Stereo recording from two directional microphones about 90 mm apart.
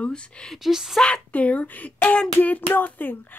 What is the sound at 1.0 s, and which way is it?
Speech, 10° left (ahead or behind).